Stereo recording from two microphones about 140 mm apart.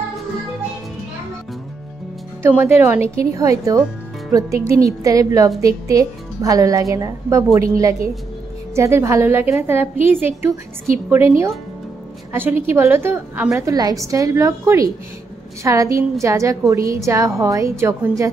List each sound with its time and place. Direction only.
2.4 s a woman's voice: 15° right (ahead or behind)